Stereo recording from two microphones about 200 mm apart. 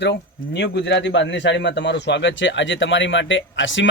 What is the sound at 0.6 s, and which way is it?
A man's voice, 60° left (ahead or behind).